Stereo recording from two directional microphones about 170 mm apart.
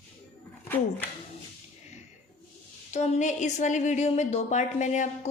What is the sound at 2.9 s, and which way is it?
A woman's voice, 45° left (ahead or behind).